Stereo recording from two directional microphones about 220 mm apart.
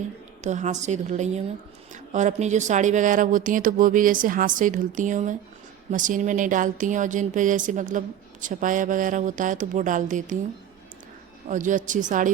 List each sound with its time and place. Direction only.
0.4 s speech: 35° right (ahead or behind)
11.4 s speech: 35° right (ahead or behind)